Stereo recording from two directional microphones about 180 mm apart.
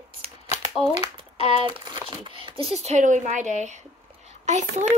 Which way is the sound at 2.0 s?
30° right (ahead or behind).